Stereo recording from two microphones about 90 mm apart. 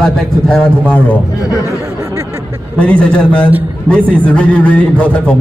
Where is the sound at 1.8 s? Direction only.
30° right (ahead or behind).